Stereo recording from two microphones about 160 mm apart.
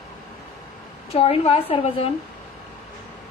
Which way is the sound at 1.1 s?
35° left (ahead or behind).